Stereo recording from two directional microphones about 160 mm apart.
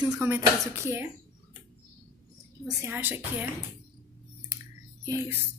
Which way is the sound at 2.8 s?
10° right (ahead or behind).